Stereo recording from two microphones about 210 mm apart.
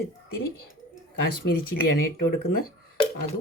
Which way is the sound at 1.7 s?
50° left (ahead or behind).